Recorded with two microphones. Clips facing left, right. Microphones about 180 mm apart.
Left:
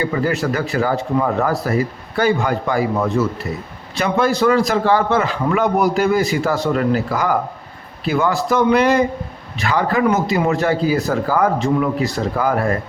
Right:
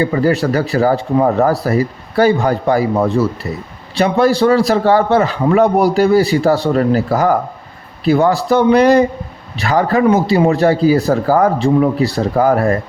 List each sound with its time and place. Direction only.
0.0 s a man's voice: 35° right (ahead or behind)